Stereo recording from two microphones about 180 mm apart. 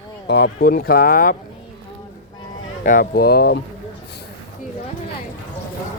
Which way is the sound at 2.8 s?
50° left (ahead or behind).